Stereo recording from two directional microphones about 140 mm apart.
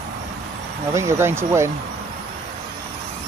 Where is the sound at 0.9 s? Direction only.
20° right (ahead or behind).